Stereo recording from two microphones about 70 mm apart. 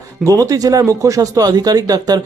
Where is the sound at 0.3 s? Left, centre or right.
Right.